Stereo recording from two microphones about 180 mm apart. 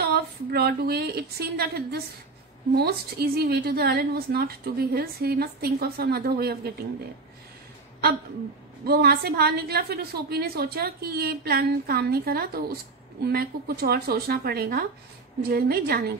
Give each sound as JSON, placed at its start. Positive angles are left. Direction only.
{"t": 0.0, "sound": "a woman's voice", "side_deg": -60}
{"t": 8.8, "sound": "a woman's voice", "side_deg": -60}